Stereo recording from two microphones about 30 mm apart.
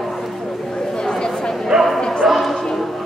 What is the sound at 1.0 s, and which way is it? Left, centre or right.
Chatter, left.